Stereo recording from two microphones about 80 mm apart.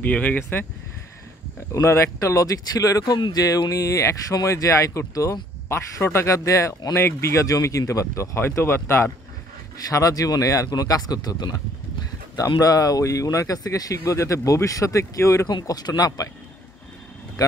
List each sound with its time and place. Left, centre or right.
0.0 s speech: left
1.7 s speech: left
3.4 s speech: left
9.8 s speech: left
12.4 s speech: left
15.4 s speech: left
17.4 s speech: left